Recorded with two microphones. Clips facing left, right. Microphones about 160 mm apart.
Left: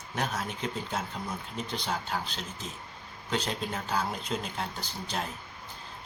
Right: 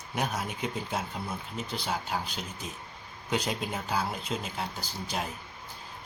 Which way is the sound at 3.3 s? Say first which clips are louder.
Right 1 dB; 10° right (ahead or behind).